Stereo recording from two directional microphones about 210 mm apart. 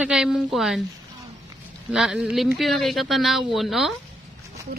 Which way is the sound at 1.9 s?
Centre (ahead or behind).